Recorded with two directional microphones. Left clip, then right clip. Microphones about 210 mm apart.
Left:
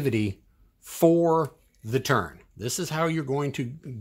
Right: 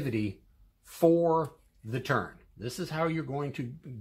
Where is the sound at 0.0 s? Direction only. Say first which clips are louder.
Left 6 dB; 50° left (ahead or behind).